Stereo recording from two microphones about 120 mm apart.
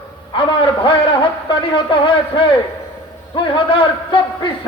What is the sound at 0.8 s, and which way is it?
A man's voice, 45° left (ahead or behind).